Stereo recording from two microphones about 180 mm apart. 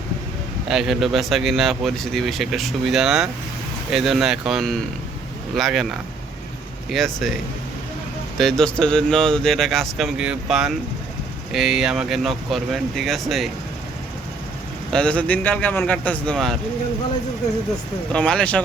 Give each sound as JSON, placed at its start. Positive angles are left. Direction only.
{"t": 0.7, "sound": "speech", "side_deg": 0}
{"t": 8.4, "sound": "speech", "side_deg": 5}
{"t": 14.8, "sound": "speech", "side_deg": 5}
{"t": 18.1, "sound": "speech", "side_deg": 5}